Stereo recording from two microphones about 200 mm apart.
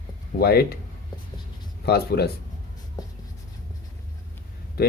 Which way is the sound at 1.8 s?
55° left (ahead or behind).